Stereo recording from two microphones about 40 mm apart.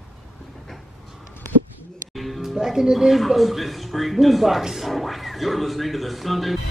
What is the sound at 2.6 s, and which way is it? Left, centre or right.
Music, centre.